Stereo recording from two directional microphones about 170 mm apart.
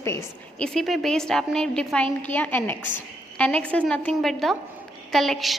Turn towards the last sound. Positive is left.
turn(degrees=0)  # may be behind; listen again after turning